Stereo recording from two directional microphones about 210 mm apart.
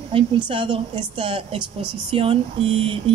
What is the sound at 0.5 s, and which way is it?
A woman's voice, 25° right (ahead or behind).